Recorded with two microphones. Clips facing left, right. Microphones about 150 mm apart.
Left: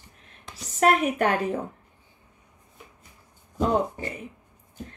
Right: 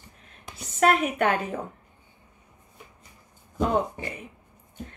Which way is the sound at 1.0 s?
35° left (ahead or behind).